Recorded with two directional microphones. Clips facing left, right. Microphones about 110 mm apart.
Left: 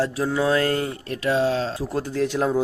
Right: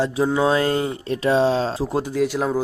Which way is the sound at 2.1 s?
5° right (ahead or behind).